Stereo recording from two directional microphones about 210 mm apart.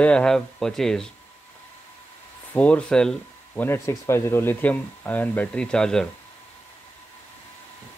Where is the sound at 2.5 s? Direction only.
5° left (ahead or behind).